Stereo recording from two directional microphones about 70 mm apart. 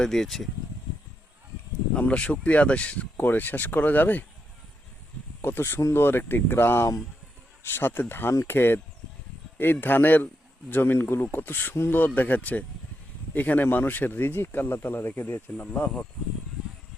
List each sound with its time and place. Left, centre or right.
0.0 s speech: centre
2.0 s speech: centre
5.4 s speech: left
9.8 s speech: left